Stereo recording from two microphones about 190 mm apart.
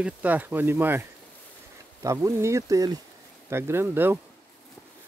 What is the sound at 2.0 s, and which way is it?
Speech, 15° right (ahead or behind).